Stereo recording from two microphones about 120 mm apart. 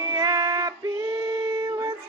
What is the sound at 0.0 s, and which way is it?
Female singing, 30° right (ahead or behind).